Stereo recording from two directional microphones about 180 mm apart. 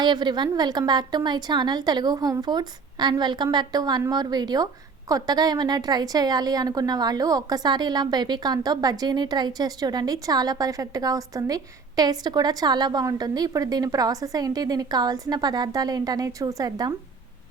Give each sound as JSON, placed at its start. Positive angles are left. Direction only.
{"t": 0.0, "sound": "a woman's voice", "side_deg": -25}